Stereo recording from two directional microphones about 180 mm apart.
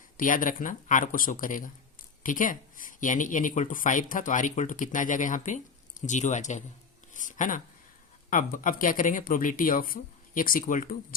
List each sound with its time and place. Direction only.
0.2 s speech: 50° left (ahead or behind)